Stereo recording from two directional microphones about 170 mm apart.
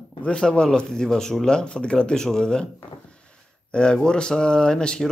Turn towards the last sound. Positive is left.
turn(degrees=5)  # may be behind; listen again after turning